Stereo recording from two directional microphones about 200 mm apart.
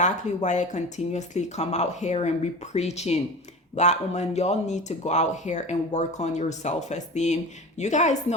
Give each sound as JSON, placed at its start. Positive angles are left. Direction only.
{"t": 0.0, "sound": "speech", "side_deg": 35}